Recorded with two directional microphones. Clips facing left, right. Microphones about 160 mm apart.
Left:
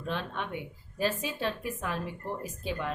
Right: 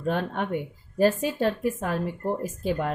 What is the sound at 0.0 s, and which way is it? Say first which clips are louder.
A woman's voice: right 8 dB; 50° right (ahead or behind).